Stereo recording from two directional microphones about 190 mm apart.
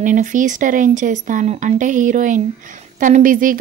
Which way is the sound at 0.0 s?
40° right (ahead or behind).